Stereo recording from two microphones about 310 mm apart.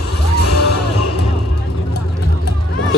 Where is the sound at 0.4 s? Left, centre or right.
Left.